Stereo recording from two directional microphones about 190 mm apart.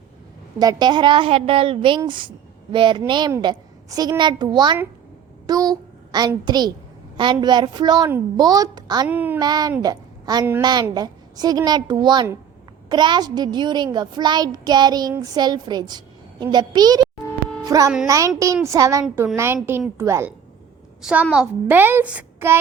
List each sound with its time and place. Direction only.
0.6 s a child's voice: 20° right (ahead or behind)
9.0 s a woman's voice: 10° right (ahead or behind)
9.4 s a child's voice: 20° right (ahead or behind)
9.8 s a sound: 20° right (ahead or behind)
10.6 s a child's voice: 20° right (ahead or behind)